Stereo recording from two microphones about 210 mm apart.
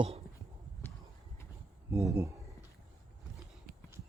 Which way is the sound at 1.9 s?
15° right (ahead or behind).